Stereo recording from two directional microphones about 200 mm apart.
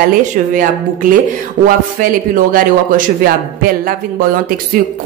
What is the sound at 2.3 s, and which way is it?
Speech, 45° right (ahead or behind).